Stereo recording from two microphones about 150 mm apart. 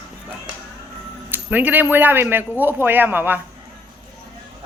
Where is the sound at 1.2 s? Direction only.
10° right (ahead or behind).